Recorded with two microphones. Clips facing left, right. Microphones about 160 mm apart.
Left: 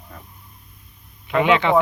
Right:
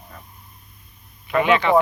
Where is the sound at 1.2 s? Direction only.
15° left (ahead or behind).